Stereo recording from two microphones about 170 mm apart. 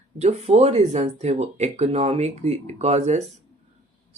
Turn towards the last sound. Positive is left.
turn(degrees=-40)  # may be behind; listen again after turning